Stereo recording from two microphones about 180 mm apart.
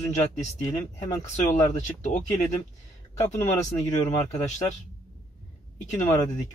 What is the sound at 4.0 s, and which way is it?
Speech, 40° left (ahead or behind).